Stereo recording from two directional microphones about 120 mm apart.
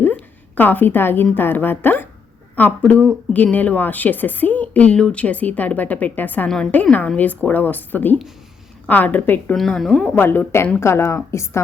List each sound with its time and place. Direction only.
0.0 s a woman's voice: 15° left (ahead or behind)
9.6 s a woman's voice: centre (ahead or behind)
10.2 s a woman's voice: 15° left (ahead or behind)